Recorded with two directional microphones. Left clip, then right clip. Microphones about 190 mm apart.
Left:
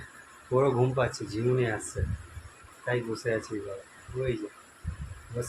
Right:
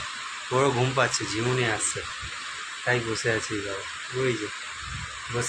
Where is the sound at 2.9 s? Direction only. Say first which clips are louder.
Right 4 dB; 35° right (ahead or behind).